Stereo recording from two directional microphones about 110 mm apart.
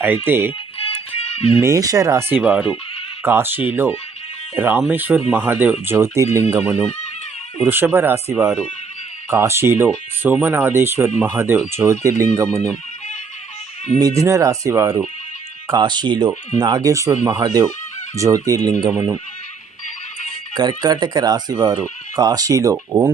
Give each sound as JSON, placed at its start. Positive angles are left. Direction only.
{"t": 0.0, "sound": "speech", "side_deg": -15}
{"t": 0.9, "sound": "music", "side_deg": 60}
{"t": 1.6, "sound": "speech", "side_deg": -30}
{"t": 2.4, "sound": "speech", "side_deg": -10}
{"t": 14.2, "sound": "speech", "side_deg": -30}
{"t": 15.8, "sound": "speech", "side_deg": -40}
{"t": 20.6, "sound": "speech", "side_deg": -40}